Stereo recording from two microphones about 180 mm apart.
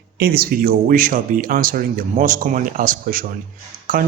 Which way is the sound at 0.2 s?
55° right (ahead or behind).